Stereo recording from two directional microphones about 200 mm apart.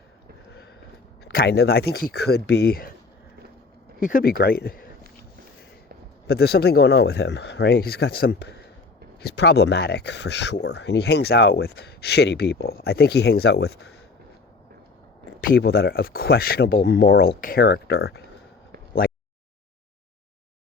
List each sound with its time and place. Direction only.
1.3 s speech: 50° left (ahead or behind)
4.0 s speech: 45° left (ahead or behind)
6.2 s speech: 55° left (ahead or behind)
15.4 s speech: 50° left (ahead or behind)